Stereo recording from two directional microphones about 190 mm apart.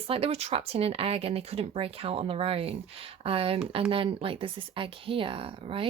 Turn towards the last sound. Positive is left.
turn(degrees=-30)  # may be behind; listen again after turning